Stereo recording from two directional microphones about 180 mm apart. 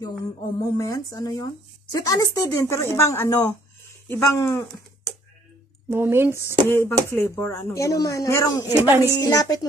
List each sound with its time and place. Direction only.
0.6 s speech: 20° left (ahead or behind)
5.9 s speech: 15° right (ahead or behind)
6.7 s speech: 15° left (ahead or behind)
8.7 s speech: 15° right (ahead or behind)
9.2 s speech: 20° left (ahead or behind)